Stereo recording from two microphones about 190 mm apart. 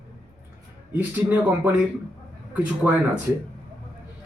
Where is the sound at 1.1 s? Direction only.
10° right (ahead or behind).